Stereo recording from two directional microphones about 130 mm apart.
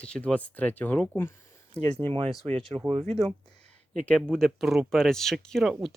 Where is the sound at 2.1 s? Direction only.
40° right (ahead or behind).